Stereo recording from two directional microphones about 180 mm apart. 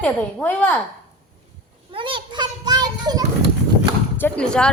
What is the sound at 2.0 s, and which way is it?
Children playing, 30° right (ahead or behind).